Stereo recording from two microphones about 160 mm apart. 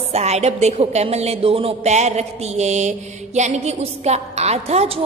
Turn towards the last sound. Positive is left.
turn(degrees=-40)  # may be behind; listen again after turning